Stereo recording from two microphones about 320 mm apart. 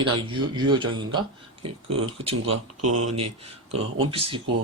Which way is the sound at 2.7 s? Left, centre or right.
Right.